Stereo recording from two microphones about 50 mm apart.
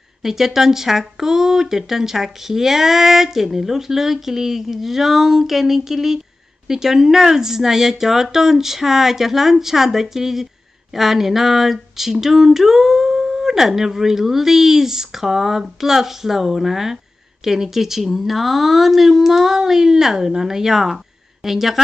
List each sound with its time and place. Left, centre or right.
0.2 s speech: centre